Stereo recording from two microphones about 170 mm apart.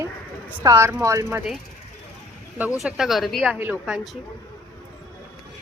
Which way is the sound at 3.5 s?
10° right (ahead or behind).